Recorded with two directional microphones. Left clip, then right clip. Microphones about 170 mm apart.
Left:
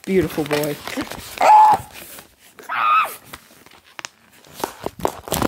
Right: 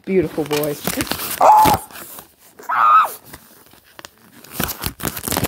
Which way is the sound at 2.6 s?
10° right (ahead or behind).